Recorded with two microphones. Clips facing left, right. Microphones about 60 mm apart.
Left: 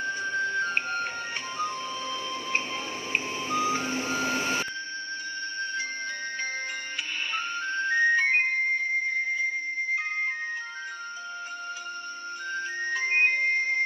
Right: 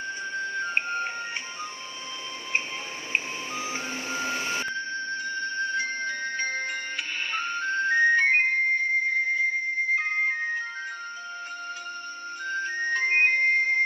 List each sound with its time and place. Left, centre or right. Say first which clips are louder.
0.7 s music: right 1 dB; centre
5.8 s music: right 4 dB; right
7.3 s music: right 3 dB; right
12.4 s music: right 3 dB; right
12.7 s music: right 2 dB; right